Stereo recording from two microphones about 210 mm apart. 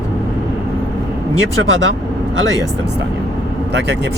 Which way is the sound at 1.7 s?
60° right (ahead or behind).